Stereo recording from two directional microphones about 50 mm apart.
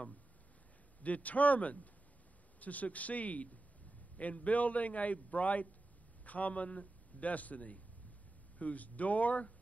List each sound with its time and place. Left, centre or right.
1.0 s a man's voice: left